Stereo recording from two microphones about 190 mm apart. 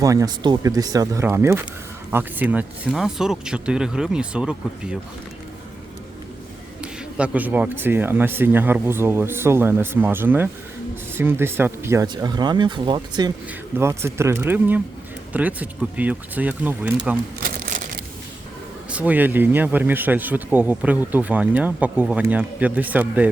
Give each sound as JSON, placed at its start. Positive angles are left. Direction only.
{"t": 0.0, "sound": "speech", "side_deg": -20}
{"t": 6.8, "sound": "speech", "side_deg": -5}
{"t": 17.4, "sound": "crumpling", "side_deg": -45}
{"t": 18.9, "sound": "speech", "side_deg": -5}